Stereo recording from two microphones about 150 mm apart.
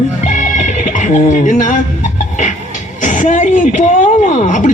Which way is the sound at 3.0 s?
55° left (ahead or behind).